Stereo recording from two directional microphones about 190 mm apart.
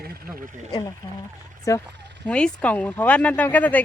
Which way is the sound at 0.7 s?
20° left (ahead or behind).